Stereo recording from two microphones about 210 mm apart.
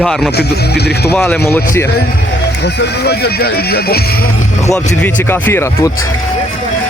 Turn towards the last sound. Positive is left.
turn(degrees=10)  # may be behind; listen again after turning